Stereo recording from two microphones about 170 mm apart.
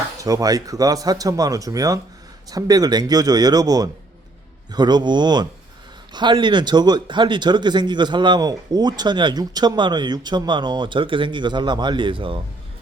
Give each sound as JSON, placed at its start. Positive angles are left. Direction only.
{"t": 0.2, "sound": "speech", "side_deg": -20}